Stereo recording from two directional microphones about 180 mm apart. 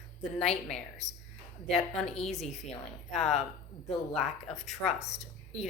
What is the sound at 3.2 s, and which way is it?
Speech, 40° left (ahead or behind).